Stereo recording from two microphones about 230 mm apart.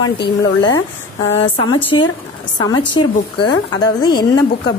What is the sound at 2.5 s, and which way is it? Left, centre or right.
A woman's voice, centre.